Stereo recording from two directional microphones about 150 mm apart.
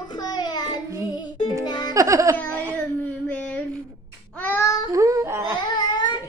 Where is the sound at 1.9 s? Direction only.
20° right (ahead or behind).